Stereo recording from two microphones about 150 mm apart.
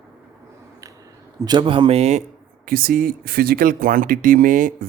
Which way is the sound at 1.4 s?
30° right (ahead or behind).